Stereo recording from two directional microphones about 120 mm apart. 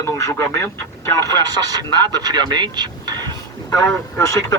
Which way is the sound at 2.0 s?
35° right (ahead or behind).